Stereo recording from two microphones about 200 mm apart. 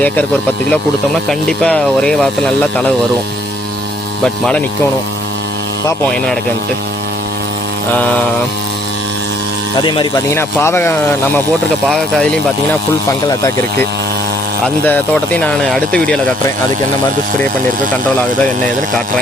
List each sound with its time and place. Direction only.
1.3 s speech: 5° left (ahead or behind)
4.2 s speech: 5° left (ahead or behind)
9.7 s speech: 25° left (ahead or behind)
13.2 s speech: 15° left (ahead or behind)
14.8 s speech: 5° left (ahead or behind)
18.6 s speech: 5° left (ahead or behind)